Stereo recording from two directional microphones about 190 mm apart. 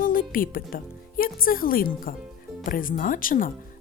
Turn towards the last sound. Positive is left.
turn(degrees=45)  # may be behind; listen again after turning